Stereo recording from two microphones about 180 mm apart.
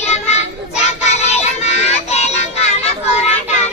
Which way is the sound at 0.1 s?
40° left (ahead or behind).